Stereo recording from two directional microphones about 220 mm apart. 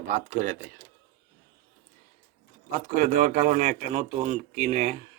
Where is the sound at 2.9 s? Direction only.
35° right (ahead or behind).